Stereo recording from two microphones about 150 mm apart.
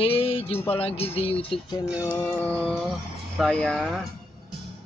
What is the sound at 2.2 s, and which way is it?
Mantra, 10° left (ahead or behind).